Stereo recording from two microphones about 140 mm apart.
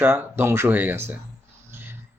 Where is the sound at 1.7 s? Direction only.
15° right (ahead or behind).